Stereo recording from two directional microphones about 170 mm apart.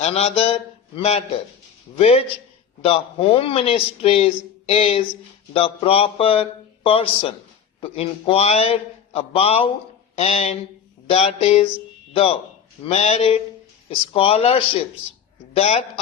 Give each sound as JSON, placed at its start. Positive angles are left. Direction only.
{"t": 0.0, "sound": "speech", "side_deg": 40}